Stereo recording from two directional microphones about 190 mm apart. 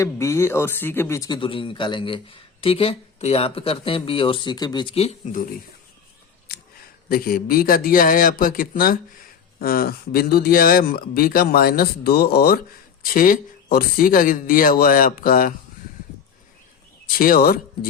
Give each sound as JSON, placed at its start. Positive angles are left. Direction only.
{"t": 0.0, "sound": "speech", "side_deg": 15}
{"t": 7.1, "sound": "speech", "side_deg": 50}
{"t": 17.1, "sound": "speech", "side_deg": 50}